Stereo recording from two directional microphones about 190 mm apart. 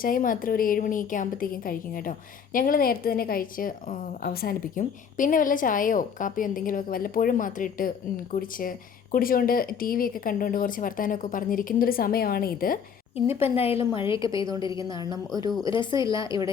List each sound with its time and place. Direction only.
0.0 s a woman's voice: 45° left (ahead or behind)
13.1 s a woman's voice: 30° left (ahead or behind)
15.3 s speech: 20° right (ahead or behind)
15.6 s speech: 25° left (ahead or behind)